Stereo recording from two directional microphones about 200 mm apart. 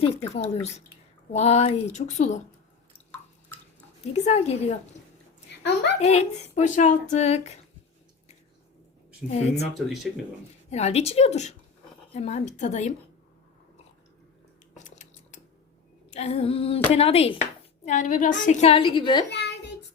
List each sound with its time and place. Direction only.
0.0 s a woman's voice: 30° left (ahead or behind)
4.1 s a woman's voice: 35° left (ahead or behind)
5.5 s a sound: 55° left (ahead or behind)
6.0 s a woman's voice: 35° left (ahead or behind)
9.7 s speech: centre (ahead or behind)
10.7 s a woman's voice: 35° left (ahead or behind)
14.8 s a sound: 35° left (ahead or behind)
16.1 s a woman's voice: 30° left (ahead or behind)
19.3 s child singing: 60° left (ahead or behind)